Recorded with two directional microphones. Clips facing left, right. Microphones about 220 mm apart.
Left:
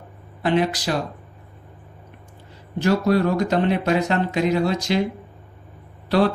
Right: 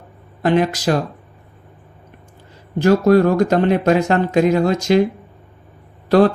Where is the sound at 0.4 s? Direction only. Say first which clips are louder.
Right 4 dB; 45° right (ahead or behind).